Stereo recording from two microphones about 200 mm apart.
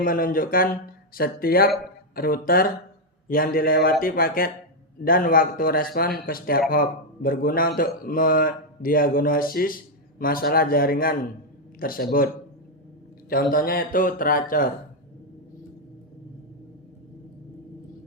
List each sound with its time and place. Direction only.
0.0 s speech: 45° left (ahead or behind)
13.3 s speech: 45° left (ahead or behind)